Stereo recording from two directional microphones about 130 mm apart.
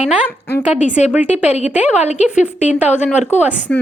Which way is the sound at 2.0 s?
60° left (ahead or behind).